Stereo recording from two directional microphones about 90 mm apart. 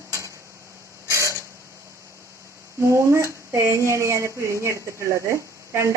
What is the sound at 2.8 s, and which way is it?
Speech, 30° right (ahead or behind).